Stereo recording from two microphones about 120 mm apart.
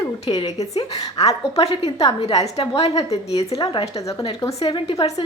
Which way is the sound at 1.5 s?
55° left (ahead or behind).